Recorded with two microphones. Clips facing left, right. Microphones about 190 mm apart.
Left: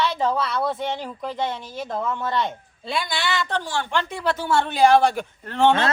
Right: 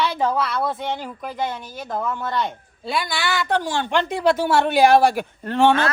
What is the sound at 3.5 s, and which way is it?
Speech, 15° right (ahead or behind).